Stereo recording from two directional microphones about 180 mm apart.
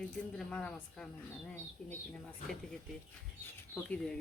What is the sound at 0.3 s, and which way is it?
Speech, 5° left (ahead or behind).